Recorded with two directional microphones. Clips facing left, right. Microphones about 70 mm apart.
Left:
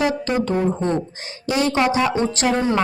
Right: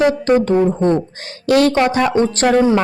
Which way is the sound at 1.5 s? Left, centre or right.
Right.